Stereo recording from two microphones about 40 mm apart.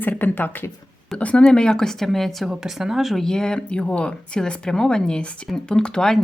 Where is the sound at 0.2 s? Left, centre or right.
Left.